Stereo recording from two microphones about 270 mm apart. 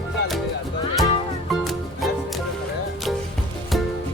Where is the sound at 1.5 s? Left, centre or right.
Centre.